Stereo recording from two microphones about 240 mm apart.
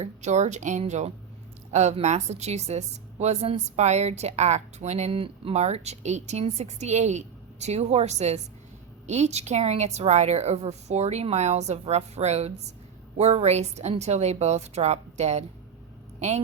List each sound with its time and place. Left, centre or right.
0.0 s a woman's voice: right